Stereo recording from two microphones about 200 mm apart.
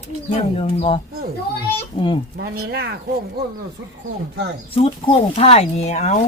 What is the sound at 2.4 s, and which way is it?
Speech, 55° right (ahead or behind).